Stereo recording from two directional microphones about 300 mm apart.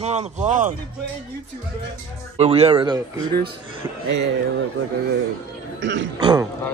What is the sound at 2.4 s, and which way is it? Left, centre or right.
Speech, centre.